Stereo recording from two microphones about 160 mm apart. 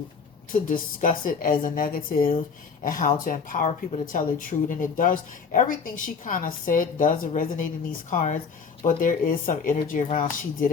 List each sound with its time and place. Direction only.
0.5 s speech: 55° left (ahead or behind)
8.1 s speech: 50° left (ahead or behind)